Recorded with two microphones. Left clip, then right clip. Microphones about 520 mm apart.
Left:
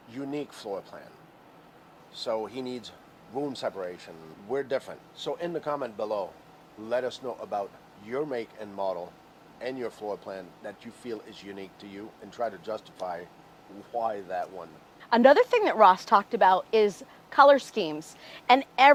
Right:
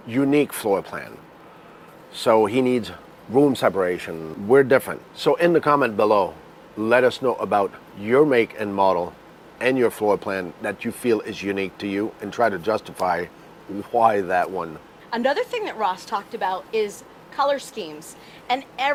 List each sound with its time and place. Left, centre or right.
0.1 s speech: right
2.2 s speech: right
15.1 s a woman's voice: left